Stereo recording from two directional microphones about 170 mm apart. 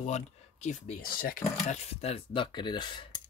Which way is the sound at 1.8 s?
35° left (ahead or behind).